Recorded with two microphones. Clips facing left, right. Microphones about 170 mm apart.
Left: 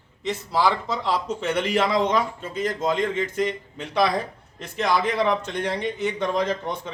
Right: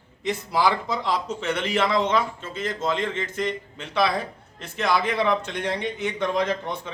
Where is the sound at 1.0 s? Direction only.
10° left (ahead or behind).